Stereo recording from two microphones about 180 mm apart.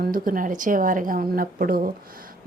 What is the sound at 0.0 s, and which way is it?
A woman's voice, 50° right (ahead or behind).